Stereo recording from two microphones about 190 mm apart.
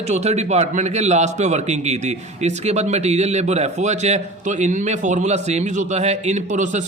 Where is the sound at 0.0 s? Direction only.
35° right (ahead or behind).